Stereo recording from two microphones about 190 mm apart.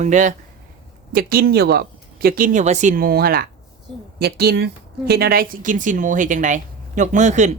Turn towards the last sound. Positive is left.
turn(degrees=-40)  # may be behind; listen again after turning